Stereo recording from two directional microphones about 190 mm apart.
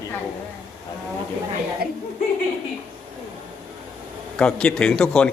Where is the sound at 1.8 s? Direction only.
55° right (ahead or behind).